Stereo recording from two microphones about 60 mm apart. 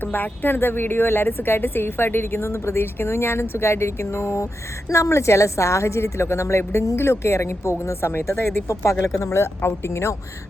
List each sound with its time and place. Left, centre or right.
0.0 s a woman's voice: left
8.7 s a woman's voice: left